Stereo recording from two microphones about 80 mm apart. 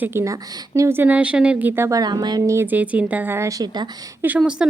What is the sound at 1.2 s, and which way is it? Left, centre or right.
Speech, centre.